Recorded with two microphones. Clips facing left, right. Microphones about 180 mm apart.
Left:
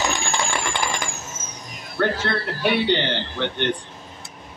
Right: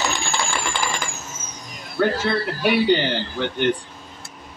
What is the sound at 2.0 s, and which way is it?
Speech, 5° right (ahead or behind).